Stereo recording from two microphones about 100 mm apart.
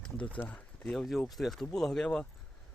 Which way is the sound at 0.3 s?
10° left (ahead or behind).